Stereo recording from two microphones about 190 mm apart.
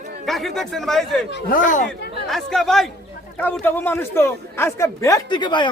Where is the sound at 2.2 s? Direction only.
Centre (ahead or behind); by 5.7 s 25° left (ahead or behind).